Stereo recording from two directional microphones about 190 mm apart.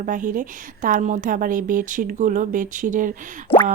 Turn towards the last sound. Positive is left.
turn(degrees=30)  # may be behind; listen again after turning